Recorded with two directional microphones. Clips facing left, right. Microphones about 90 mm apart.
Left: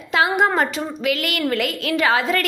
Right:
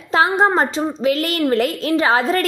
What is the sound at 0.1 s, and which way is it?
A woman's voice, 35° right (ahead or behind).